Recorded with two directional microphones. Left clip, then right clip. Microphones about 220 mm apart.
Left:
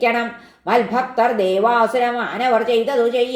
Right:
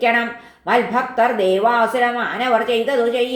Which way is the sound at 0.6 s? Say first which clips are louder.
Even; 30° left (ahead or behind).